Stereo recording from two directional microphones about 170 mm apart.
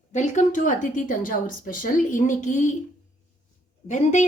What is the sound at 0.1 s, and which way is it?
A woman's voice, 45° left (ahead or behind).